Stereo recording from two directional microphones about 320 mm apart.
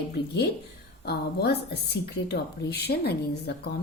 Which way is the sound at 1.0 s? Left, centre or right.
Left.